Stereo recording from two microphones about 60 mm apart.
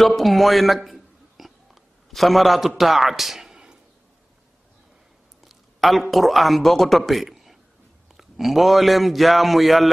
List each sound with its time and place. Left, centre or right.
0.0 s a sound: centre
2.1 s speech: centre
5.4 s speech: centre